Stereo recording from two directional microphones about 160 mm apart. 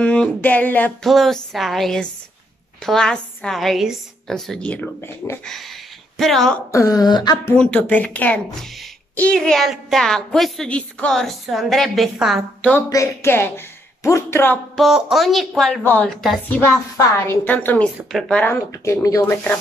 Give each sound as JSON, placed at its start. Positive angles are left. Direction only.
{"t": 0.0, "sound": "a woman's voice", "side_deg": 10}
{"t": 5.4, "sound": "speech", "side_deg": 0}
{"t": 6.7, "sound": "a sound", "side_deg": 20}
{"t": 7.5, "sound": "a woman's voice", "side_deg": 5}
{"t": 12.7, "sound": "a woman's voice", "side_deg": 20}
{"t": 14.8, "sound": "a woman's voice", "side_deg": -5}